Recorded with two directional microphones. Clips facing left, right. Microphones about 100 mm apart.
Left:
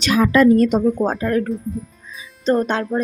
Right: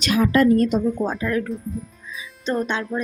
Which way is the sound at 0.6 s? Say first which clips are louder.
Left 4 dB; 60° left (ahead or behind).